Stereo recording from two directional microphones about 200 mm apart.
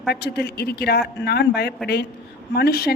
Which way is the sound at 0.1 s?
55° left (ahead or behind).